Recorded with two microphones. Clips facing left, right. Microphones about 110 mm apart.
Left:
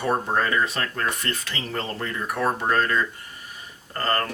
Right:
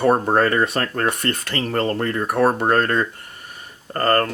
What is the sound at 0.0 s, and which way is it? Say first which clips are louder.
Speech: right 7 dB; 50° right (ahead or behind).